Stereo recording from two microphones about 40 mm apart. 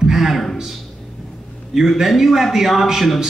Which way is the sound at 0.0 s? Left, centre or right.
Centre.